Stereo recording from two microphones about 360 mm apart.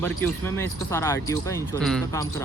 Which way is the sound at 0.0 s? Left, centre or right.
Centre.